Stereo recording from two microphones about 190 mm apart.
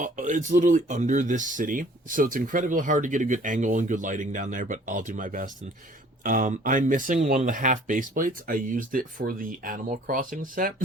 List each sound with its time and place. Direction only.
0.0 s speech: 40° right (ahead or behind)